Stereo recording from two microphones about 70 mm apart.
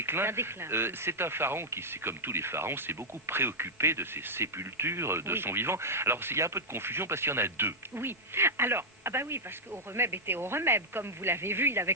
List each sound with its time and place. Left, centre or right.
0.0 s speech: right